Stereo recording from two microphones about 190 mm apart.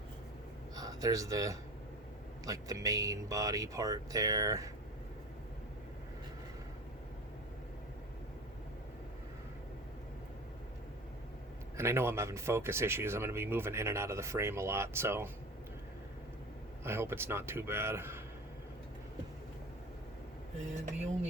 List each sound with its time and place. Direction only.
0.8 s speech: 20° right (ahead or behind)
11.8 s speech: 15° right (ahead or behind)
16.8 s speech: 15° right (ahead or behind)